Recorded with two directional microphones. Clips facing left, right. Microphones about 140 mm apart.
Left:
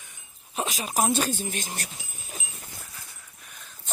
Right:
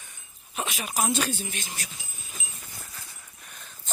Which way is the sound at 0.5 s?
35° left (ahead or behind).